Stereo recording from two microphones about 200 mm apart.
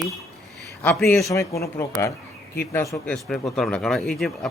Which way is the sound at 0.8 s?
10° left (ahead or behind).